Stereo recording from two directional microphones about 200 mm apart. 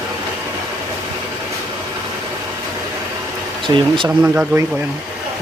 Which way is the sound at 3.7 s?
25° right (ahead or behind).